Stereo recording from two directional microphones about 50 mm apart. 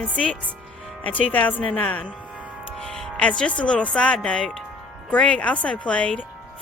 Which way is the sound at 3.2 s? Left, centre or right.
Left.